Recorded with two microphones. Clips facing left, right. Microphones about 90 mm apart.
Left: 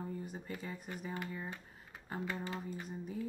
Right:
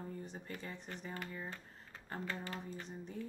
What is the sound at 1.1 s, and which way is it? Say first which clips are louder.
Computer keyboard: left 3 dB; 10° left (ahead or behind).